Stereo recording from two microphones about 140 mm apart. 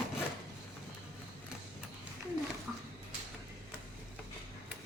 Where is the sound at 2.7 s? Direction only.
5° right (ahead or behind).